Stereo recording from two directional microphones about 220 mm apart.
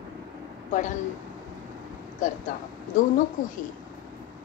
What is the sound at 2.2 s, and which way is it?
A woman's voice, 40° left (ahead or behind).